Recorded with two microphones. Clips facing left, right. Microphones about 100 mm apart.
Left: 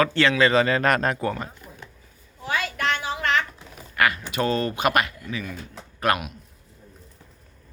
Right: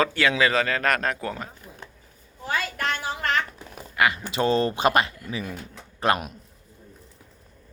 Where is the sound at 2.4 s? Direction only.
35° right (ahead or behind).